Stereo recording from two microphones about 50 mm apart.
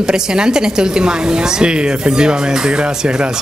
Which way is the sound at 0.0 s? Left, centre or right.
Centre.